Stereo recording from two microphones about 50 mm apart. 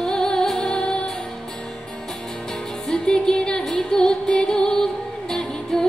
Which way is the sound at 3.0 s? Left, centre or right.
Centre.